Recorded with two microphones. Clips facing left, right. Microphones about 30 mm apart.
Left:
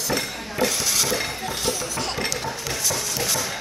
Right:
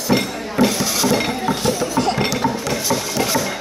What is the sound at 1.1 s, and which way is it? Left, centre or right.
Chink, right.